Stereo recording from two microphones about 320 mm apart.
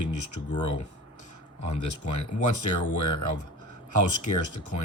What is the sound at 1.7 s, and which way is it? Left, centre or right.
Speech, left.